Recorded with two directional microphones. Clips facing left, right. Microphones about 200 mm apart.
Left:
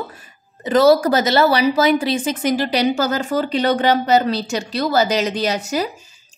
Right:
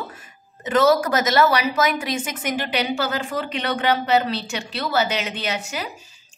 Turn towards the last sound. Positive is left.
turn(degrees=40)  # may be behind; listen again after turning